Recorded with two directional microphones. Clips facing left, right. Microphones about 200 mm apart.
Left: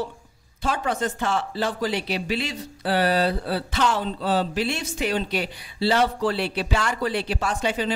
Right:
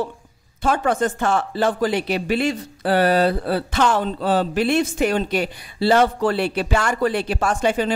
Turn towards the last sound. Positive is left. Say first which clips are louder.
# right 5 dB
turn(degrees=-50)  # may be behind; listen again after turning